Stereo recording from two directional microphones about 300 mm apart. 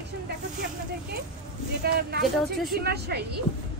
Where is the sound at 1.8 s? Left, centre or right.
Right.